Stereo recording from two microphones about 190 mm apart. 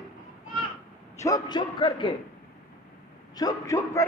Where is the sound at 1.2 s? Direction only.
20° left (ahead or behind).